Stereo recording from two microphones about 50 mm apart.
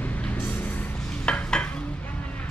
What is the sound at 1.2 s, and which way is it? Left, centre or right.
Dishes, left.